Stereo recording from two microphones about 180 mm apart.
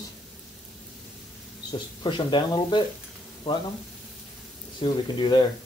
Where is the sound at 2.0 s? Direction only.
25° left (ahead or behind).